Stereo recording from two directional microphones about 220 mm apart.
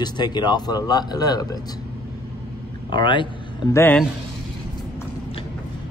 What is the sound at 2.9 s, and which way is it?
Speech, 20° left (ahead or behind).